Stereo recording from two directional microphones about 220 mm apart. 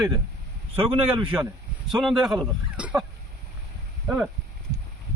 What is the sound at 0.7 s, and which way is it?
Speech, 25° right (ahead or behind).